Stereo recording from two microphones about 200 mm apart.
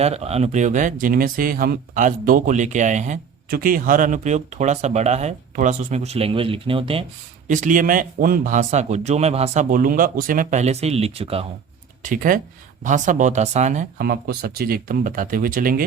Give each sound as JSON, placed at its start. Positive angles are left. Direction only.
{"t": 0.0, "sound": "speech", "side_deg": -30}
{"t": 7.4, "sound": "speech", "side_deg": -40}
{"t": 12.0, "sound": "speech", "side_deg": -45}